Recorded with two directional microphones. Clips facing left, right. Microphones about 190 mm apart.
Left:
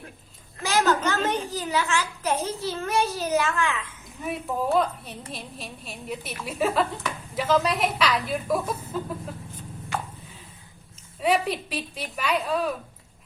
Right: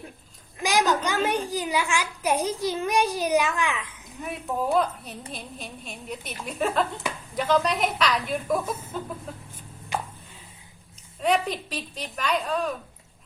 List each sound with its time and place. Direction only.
0.6 s a woman's voice: 15° right (ahead or behind)
4.2 s a woman's voice: centre (ahead or behind)
9.9 s a sound: 15° right (ahead or behind)
11.2 s a woman's voice: 5° left (ahead or behind)